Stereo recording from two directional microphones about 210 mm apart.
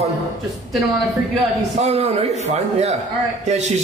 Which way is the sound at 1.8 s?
30° right (ahead or behind).